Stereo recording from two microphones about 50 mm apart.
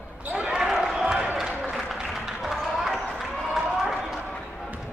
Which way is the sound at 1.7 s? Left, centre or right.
Centre.